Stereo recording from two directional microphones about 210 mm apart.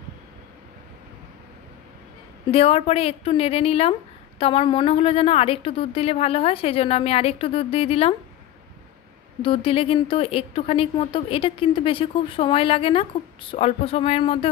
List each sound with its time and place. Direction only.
2.5 s a woman's voice: 25° left (ahead or behind)
9.4 s a woman's voice: 25° left (ahead or behind)